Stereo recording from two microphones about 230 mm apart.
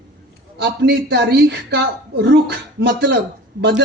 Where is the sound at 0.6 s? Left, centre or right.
Right.